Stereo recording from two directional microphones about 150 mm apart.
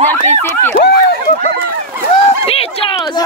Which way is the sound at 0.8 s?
90° left.